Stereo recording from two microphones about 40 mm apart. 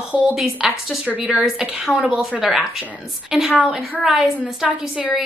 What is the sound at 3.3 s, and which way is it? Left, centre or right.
A woman's voice, centre.